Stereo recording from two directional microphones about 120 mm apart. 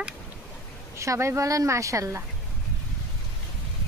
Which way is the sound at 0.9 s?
25° right (ahead or behind).